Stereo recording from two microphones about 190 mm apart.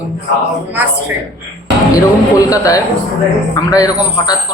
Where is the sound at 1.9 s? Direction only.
20° left (ahead or behind).